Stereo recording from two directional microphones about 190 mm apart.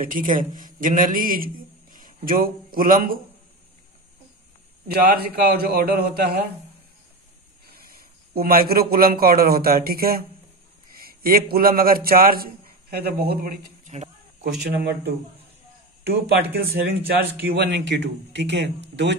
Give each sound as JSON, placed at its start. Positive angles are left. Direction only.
{"t": 0.0, "sound": "a man's voice", "side_deg": -45}
{"t": 4.8, "sound": "a man's voice", "side_deg": -50}
{"t": 8.4, "sound": "a man's voice", "side_deg": -50}
{"t": 16.3, "sound": "speech", "side_deg": -55}